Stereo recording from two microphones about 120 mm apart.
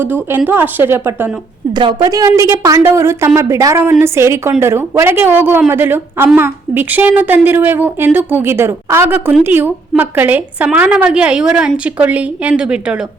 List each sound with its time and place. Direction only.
0.0 s a woman's voice: 15° right (ahead or behind)
1.7 s a woman's voice: 40° right (ahead or behind); by 13.1 s 10° right (ahead or behind)